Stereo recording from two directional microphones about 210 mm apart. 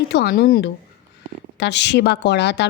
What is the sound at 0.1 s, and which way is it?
Speech, 50° left (ahead or behind).